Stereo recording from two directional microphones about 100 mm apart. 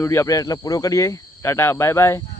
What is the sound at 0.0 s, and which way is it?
Speech, 25° left (ahead or behind).